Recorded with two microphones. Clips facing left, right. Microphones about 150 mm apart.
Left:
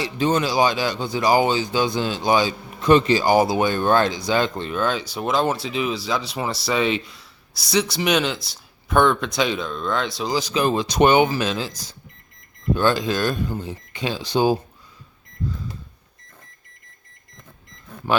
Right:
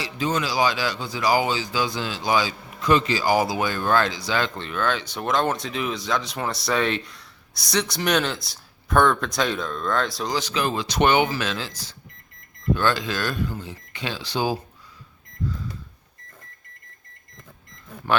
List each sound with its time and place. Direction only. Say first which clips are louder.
0.0 s speech: left 5 dB; 30° left (ahead or behind)
5.1 s speech: left 2 dB; 5° left (ahead or behind)
10.5 s speech: left 4 dB; 20° left (ahead or behind)